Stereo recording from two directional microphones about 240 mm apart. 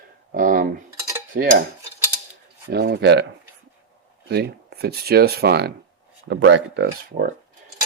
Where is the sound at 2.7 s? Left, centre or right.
Right.